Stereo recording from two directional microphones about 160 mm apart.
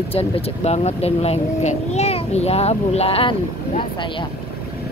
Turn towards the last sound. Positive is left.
turn(degrees=35)  # may be behind; listen again after turning